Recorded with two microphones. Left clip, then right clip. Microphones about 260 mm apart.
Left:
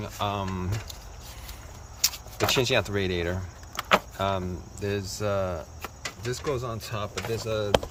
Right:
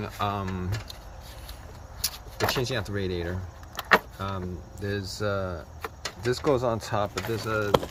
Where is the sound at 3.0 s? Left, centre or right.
Left.